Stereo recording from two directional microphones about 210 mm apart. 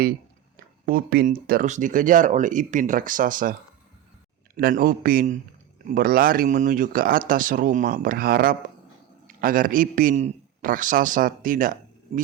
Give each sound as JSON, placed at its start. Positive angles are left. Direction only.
{"t": 0.9, "sound": "speech", "side_deg": -45}
{"t": 4.5, "sound": "speech", "side_deg": -45}